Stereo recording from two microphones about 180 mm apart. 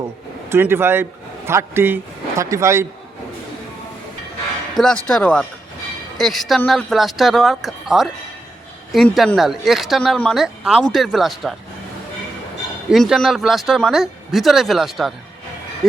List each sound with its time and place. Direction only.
0.5 s speech: 15° right (ahead or behind)
4.7 s speech: 5° left (ahead or behind)
12.9 s speech: centre (ahead or behind)